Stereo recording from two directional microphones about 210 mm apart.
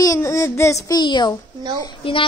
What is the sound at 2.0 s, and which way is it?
Speech, 25° left (ahead or behind).